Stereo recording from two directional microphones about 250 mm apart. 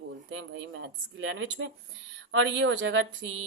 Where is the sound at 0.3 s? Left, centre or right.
Right.